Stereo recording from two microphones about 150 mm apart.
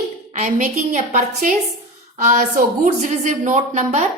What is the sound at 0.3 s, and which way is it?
A woman's voice, 55° right (ahead or behind).